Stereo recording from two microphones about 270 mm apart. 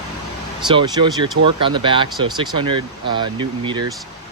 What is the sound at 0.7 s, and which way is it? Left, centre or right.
Speech, centre.